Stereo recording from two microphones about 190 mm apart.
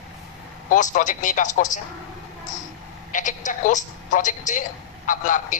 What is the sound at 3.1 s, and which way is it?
A woman's voice, 45° left (ahead or behind).